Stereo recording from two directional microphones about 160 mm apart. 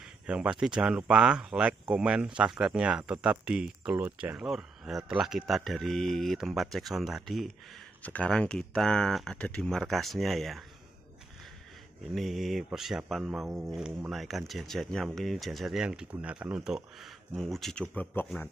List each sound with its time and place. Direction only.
0.0 s speech: 5° right (ahead or behind)
12.1 s speech: centre (ahead or behind)